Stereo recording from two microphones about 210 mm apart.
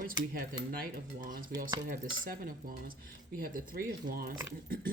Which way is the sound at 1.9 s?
40° right (ahead or behind).